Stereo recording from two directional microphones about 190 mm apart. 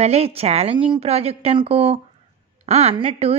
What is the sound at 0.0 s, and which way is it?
Speech, 35° right (ahead or behind).